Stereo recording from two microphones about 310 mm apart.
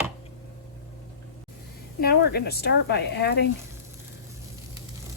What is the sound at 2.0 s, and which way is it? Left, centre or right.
Speech, left.